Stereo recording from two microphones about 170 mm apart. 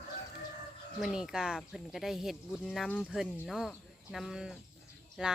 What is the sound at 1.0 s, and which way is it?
Speech, 5° right (ahead or behind).